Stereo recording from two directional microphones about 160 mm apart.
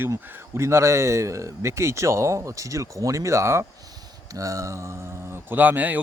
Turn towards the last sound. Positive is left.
turn(degrees=-10)  # may be behind; listen again after turning